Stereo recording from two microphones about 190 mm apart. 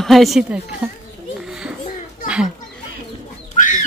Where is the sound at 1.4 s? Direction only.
5° right (ahead or behind).